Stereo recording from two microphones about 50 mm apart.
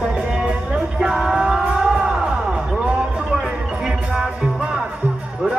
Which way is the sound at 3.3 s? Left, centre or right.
Centre.